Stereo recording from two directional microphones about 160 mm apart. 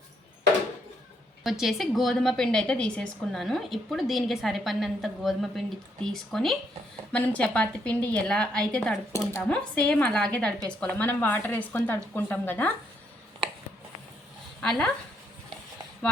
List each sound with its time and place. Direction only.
1.5 s a woman's voice: centre (ahead or behind)
14.6 s speech: 5° left (ahead or behind)